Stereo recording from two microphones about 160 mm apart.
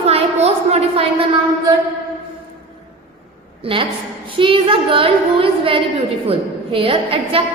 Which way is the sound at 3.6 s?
35° right (ahead or behind).